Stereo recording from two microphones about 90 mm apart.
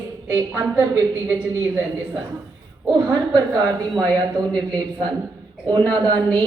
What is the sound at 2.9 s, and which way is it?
A woman's voice, 45° right (ahead or behind).